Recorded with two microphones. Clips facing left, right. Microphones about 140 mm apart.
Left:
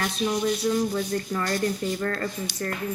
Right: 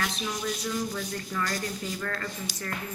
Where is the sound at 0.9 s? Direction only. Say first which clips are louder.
Left 6 dB; 35° left (ahead or behind).